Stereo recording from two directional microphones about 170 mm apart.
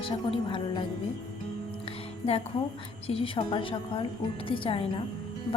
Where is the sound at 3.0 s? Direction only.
35° left (ahead or behind).